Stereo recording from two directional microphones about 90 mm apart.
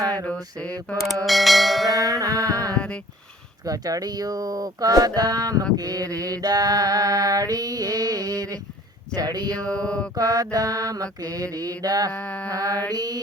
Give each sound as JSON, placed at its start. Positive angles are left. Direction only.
{"t": 0.9, "sound": "a sound", "side_deg": 10}
{"t": 1.2, "sound": "church bell", "side_deg": 0}
{"t": 1.9, "sound": "mantra", "side_deg": -40}
{"t": 2.7, "sound": "speech", "side_deg": 10}
{"t": 3.6, "sound": "mantra", "side_deg": -40}
{"t": 9.6, "sound": "a sound", "side_deg": 10}
{"t": 10.2, "sound": "mantra", "side_deg": -40}
{"t": 12.1, "sound": "a sound", "side_deg": 15}
{"t": 12.5, "sound": "mantra", "side_deg": -40}